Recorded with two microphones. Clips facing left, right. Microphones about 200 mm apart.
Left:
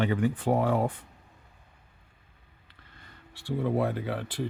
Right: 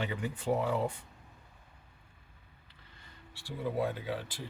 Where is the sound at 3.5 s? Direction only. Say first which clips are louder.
Left 6 dB; 60° left (ahead or behind).